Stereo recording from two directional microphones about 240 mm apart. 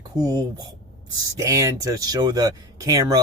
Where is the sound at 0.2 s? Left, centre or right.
Centre.